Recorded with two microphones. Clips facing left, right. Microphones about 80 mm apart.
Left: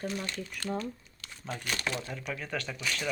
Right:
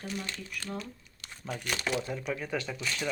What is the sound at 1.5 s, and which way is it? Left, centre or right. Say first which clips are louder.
Speech: right 2 dB; centre.